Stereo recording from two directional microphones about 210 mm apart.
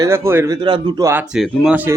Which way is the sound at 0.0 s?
10° right (ahead or behind).